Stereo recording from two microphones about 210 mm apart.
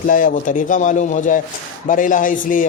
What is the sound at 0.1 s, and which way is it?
A man's voice, 40° left (ahead or behind).